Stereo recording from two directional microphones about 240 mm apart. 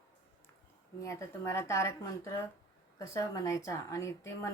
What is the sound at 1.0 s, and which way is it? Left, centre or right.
A woman's voice, centre.